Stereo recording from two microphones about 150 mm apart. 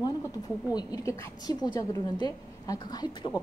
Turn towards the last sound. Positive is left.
turn(degrees=25)  # may be behind; listen again after turning